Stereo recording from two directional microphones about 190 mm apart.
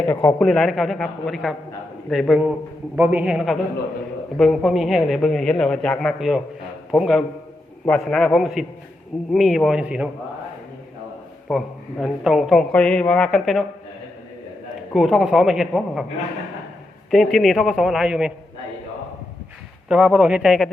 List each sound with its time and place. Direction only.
0.0 s a man's voice: 10° left (ahead or behind); by 10.1 s 5° right (ahead or behind)
11.4 s a man's voice: centre (ahead or behind)
14.9 s a man's voice: centre (ahead or behind)
17.1 s a man's voice: centre (ahead or behind)
19.9 s a man's voice: 5° right (ahead or behind)